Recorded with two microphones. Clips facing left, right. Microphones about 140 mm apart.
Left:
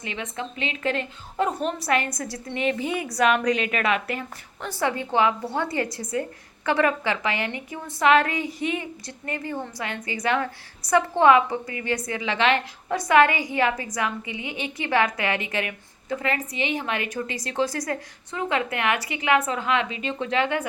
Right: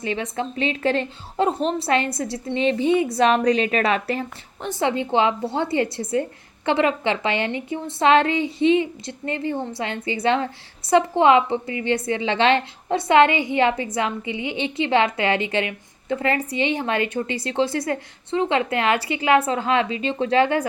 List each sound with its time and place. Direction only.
0.0 s a woman's voice: 35° right (ahead or behind)
4.7 s a woman's voice: 20° right (ahead or behind)